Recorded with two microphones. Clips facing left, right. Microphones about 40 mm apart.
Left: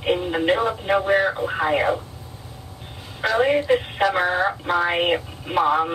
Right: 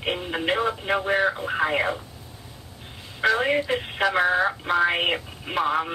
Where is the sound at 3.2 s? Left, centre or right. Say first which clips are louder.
Left 3 dB; centre.